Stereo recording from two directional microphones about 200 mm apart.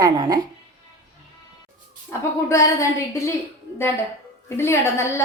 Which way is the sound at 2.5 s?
15° left (ahead or behind).